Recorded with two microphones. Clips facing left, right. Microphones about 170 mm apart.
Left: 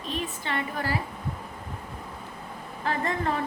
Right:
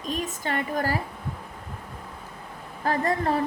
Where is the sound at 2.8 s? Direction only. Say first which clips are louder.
Right 4 dB; 40° right (ahead or behind).